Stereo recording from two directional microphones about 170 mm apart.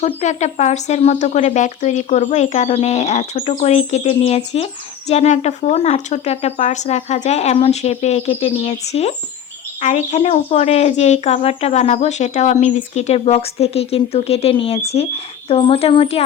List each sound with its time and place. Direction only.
0.2 s speech: 45° left (ahead or behind)